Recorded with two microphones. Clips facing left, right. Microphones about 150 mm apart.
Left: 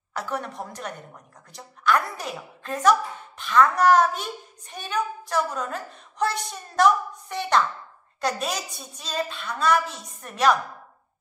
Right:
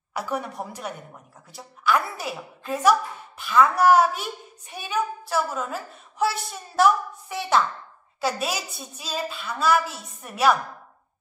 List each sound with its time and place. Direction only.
0.1 s a woman's voice: 10° right (ahead or behind)